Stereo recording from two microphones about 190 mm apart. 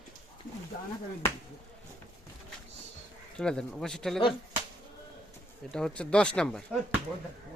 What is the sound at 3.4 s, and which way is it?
Speech, 5° left (ahead or behind).